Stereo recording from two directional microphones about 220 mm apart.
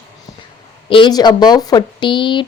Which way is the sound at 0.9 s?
20° left (ahead or behind).